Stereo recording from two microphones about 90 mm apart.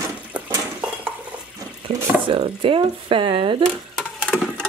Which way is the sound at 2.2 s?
70° right (ahead or behind).